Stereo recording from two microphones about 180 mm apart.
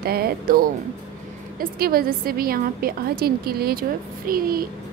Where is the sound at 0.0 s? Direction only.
60° right (ahead or behind).